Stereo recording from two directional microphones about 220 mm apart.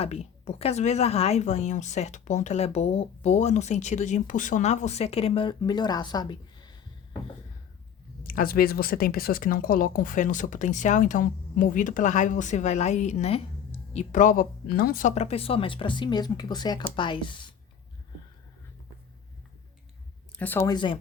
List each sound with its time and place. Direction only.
0.0 s speech: 30° left (ahead or behind)
8.2 s speech: 40° left (ahead or behind); by 17.5 s 20° left (ahead or behind)
20.3 s speech: 10° left (ahead or behind)